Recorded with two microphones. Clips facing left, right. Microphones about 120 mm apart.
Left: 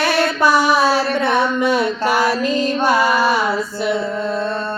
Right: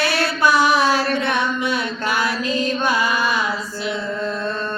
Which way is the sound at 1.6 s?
35° left (ahead or behind).